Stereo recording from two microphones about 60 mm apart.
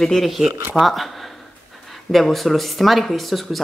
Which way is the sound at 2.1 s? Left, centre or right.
Centre.